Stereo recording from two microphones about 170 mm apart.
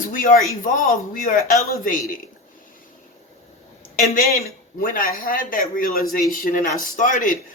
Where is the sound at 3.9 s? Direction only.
55° left (ahead or behind).